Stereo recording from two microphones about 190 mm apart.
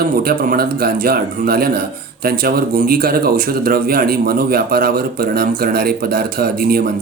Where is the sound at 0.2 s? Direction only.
55° right (ahead or behind).